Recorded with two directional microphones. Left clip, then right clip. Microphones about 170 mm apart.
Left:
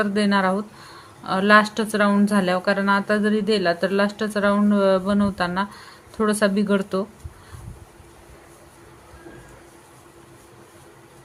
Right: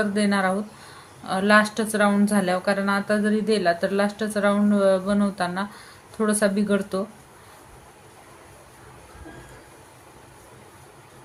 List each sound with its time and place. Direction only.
0.0 s speech: 30° left (ahead or behind)